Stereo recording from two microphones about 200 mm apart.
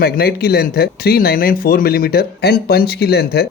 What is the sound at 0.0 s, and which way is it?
Speech, 50° left (ahead or behind).